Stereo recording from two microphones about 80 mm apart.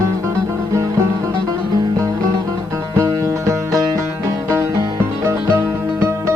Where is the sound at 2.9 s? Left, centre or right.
Right.